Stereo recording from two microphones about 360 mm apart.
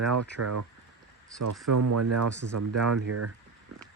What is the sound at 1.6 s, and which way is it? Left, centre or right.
Speech, right.